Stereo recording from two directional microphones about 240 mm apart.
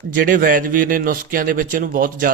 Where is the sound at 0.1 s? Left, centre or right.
Right.